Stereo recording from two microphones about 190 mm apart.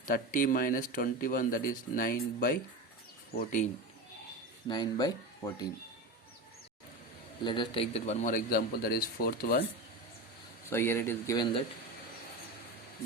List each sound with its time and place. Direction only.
0.0 s speech: 45° left (ahead or behind)
4.7 s speech: 20° left (ahead or behind)
7.4 s speech: 25° left (ahead or behind); by 9.6 s 50° left (ahead or behind)
10.7 s speech: 15° left (ahead or behind)